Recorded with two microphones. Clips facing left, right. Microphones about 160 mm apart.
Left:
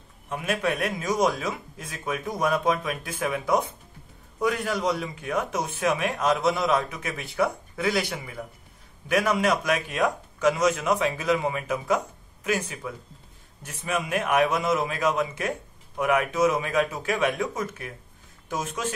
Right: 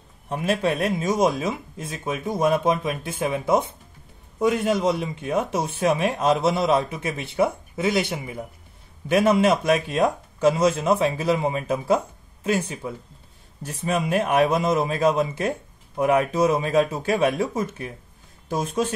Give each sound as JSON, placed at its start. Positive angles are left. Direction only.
{"t": 0.3, "sound": "speech", "side_deg": -30}